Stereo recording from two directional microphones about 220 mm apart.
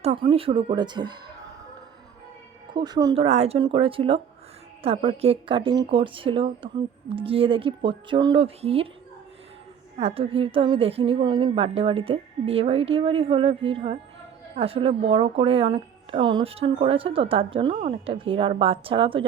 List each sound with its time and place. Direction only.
0.0 s a woman's voice: 25° right (ahead or behind)
2.7 s a woman's voice: 20° right (ahead or behind)
3.2 s a woman's voice: 30° right (ahead or behind)
10.0 s a woman's voice: 25° right (ahead or behind)